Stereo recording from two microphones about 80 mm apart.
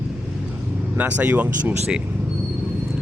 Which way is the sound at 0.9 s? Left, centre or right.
Right.